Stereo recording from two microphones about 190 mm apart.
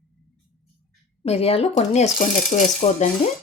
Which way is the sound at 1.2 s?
30° left (ahead or behind).